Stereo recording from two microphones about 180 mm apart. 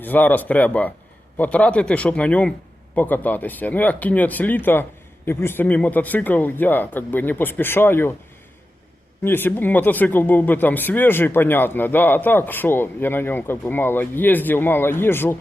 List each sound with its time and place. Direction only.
0.0 s speech: 10° left (ahead or behind)
9.2 s speech: 10° left (ahead or behind)